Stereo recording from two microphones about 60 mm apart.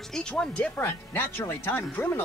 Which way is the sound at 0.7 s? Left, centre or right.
Centre.